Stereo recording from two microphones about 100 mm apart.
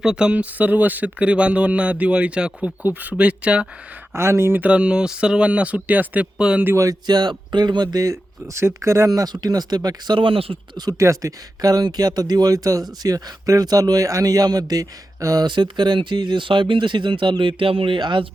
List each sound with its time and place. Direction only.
0.0 s speech: 10° right (ahead or behind)
4.1 s speech: 25° right (ahead or behind); by 6.7 s 10° right (ahead or behind)
6.7 s speech: 35° right (ahead or behind); by 10.6 s 65° right (ahead or behind)
10.8 s speech: 40° right (ahead or behind)
15.4 s speech: 50° right (ahead or behind)